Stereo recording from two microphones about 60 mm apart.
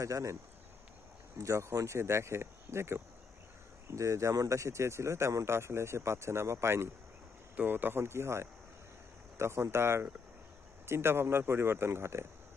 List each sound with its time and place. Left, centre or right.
0.0 s speech: right
1.4 s speech: right
7.5 s speech: right